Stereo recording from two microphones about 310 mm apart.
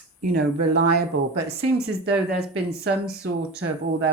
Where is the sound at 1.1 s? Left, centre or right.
Right.